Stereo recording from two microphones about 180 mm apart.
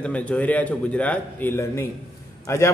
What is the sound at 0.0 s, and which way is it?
A man's voice, 5° left (ahead or behind).